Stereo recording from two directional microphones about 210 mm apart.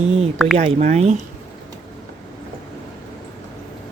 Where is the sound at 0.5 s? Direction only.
30° right (ahead or behind).